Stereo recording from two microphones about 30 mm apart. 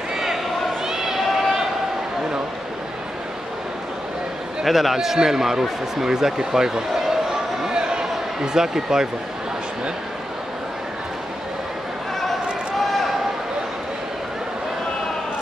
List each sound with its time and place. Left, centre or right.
0.8 s run: centre
4.6 s a man's voice: centre
4.9 s a man's voice: centre
7.7 s a sound: right
8.5 s a man's voice: centre
12.7 s a sound: centre